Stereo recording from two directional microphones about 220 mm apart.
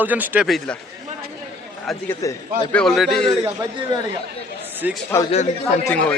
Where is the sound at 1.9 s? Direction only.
10° left (ahead or behind).